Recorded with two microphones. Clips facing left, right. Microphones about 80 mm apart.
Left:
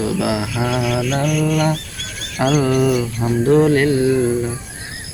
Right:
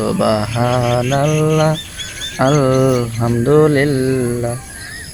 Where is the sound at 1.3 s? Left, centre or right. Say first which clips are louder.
Right 3 dB; right.